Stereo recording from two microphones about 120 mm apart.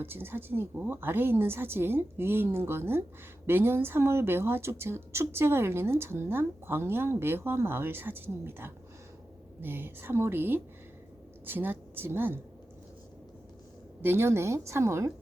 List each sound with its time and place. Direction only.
0.0 s a woman's voice: 20° right (ahead or behind)
14.0 s speech: 20° right (ahead or behind)